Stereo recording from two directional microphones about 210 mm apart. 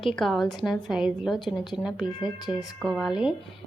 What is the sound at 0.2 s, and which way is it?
A woman's voice, centre (ahead or behind).